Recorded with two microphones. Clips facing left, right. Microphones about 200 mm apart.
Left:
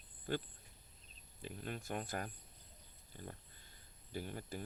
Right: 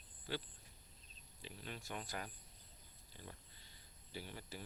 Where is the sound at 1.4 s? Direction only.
50° left (ahead or behind).